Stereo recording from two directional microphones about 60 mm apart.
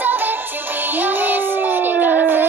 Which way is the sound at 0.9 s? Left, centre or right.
Right.